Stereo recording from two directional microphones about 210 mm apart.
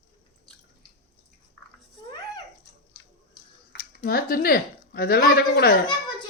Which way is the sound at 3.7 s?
45° left (ahead or behind).